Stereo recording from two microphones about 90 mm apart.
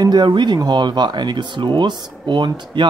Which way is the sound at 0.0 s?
55° right (ahead or behind).